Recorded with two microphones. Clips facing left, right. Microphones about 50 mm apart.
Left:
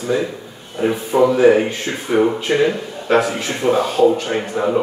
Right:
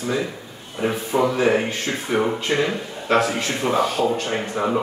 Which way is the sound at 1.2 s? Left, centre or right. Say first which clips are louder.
Left 8 dB; centre.